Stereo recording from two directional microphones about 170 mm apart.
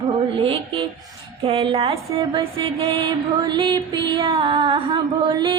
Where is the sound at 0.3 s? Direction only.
35° right (ahead or behind).